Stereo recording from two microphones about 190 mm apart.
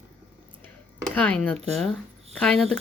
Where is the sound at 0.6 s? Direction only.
5° left (ahead or behind).